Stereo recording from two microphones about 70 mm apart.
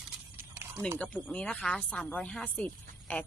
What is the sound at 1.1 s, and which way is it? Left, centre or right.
Speech, centre.